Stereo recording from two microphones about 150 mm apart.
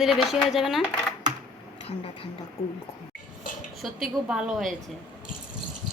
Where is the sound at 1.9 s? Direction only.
40° left (ahead or behind).